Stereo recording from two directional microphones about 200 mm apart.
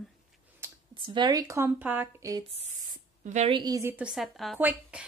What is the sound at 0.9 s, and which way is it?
A woman's voice, 25° right (ahead or behind).